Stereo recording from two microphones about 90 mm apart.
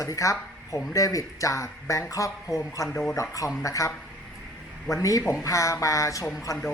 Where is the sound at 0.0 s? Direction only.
40° left (ahead or behind).